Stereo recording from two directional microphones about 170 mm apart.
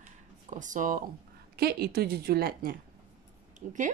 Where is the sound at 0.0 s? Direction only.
45° right (ahead or behind).